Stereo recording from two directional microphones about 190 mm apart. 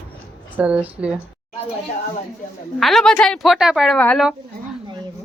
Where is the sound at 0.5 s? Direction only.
5° right (ahead or behind).